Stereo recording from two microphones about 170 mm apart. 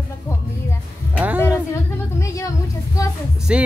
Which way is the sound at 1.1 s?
10° right (ahead or behind).